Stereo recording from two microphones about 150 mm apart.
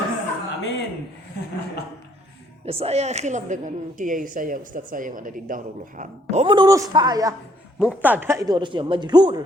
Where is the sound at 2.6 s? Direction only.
40° right (ahead or behind); by 6.4 s 60° right (ahead or behind).